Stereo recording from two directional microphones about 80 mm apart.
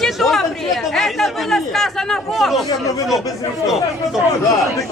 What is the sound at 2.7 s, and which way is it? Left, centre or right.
Speech, left.